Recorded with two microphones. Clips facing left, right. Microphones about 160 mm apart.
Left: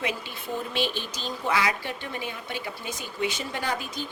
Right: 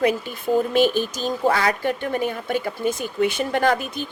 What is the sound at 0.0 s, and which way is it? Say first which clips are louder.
Speech: right 11 dB; 45° right (ahead or behind).